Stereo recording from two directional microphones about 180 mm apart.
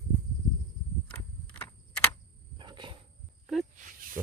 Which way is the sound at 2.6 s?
25° right (ahead or behind).